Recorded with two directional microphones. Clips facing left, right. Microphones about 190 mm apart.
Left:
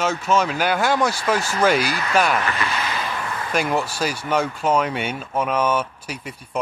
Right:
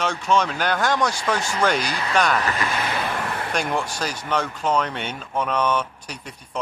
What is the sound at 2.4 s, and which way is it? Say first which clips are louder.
Vehicle: even; 45° right (ahead or behind).